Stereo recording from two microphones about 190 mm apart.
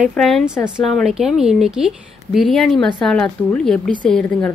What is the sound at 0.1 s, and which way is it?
A woman's voice, centre (ahead or behind).